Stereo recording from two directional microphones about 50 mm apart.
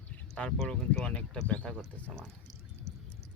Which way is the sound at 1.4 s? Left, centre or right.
Left.